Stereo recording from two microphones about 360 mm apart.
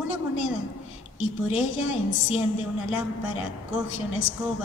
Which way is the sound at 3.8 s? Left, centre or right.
Left.